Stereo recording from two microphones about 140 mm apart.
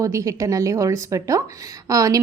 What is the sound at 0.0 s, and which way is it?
A woman's voice, 25° right (ahead or behind).